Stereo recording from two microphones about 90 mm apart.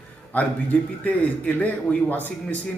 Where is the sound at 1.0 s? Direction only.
15° left (ahead or behind).